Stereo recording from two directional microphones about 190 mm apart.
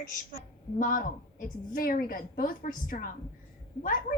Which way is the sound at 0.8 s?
45° left (ahead or behind).